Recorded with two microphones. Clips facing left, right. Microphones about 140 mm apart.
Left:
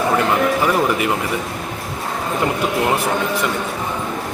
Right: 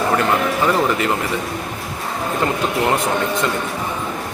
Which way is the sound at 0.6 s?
15° left (ahead or behind).